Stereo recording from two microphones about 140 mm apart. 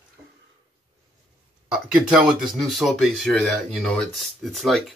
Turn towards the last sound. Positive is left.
turn(degrees=0)  # may be behind; listen again after turning